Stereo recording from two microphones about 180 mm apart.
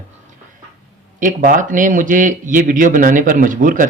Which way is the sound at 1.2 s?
50° right (ahead or behind).